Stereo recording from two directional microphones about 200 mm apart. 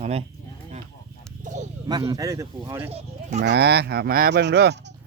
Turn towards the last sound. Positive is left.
turn(degrees=-55)  # may be behind; listen again after turning